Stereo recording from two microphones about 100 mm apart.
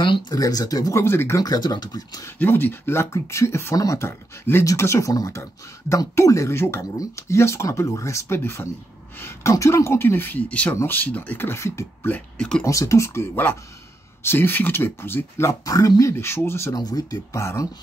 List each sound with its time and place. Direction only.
0.3 s speech: 40° left (ahead or behind)
1.4 s speech: 45° left (ahead or behind)
2.3 s speech: 20° left (ahead or behind)
12.1 s speech: 10° left (ahead or behind)
12.6 s speech: 30° left (ahead or behind)
16.7 s speech: 40° left (ahead or behind)
17.4 s speech: 30° left (ahead or behind)